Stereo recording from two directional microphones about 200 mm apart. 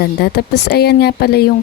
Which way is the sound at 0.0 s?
55° left (ahead or behind).